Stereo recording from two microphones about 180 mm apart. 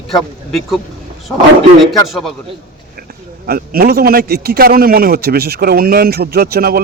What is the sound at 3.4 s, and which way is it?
A man's voice, 55° right (ahead or behind).